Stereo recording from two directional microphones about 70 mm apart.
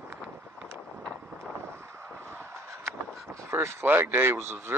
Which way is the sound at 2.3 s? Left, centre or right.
Right.